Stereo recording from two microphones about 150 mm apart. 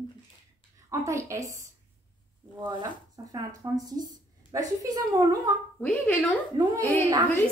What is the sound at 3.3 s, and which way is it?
A woman's voice, 25° right (ahead or behind).